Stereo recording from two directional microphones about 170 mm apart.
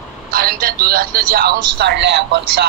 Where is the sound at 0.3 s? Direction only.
60° right (ahead or behind).